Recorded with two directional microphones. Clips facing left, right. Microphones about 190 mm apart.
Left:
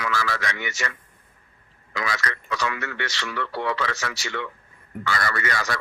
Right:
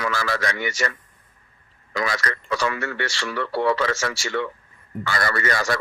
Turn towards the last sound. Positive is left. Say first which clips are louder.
# right 4 dB
turn(degrees=-35)  # may be behind; listen again after turning